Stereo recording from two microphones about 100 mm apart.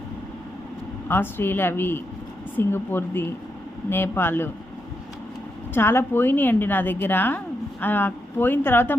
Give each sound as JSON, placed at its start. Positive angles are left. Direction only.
{"t": 1.0, "sound": "a woman's voice", "side_deg": 20}
{"t": 5.7, "sound": "a woman's voice", "side_deg": 25}